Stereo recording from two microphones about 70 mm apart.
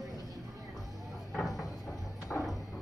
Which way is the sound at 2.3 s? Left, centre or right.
Centre.